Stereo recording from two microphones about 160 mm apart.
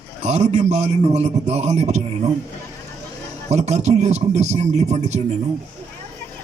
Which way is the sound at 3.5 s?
45° right (ahead or behind).